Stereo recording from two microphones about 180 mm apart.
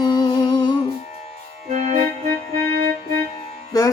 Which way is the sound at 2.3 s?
60° right (ahead or behind).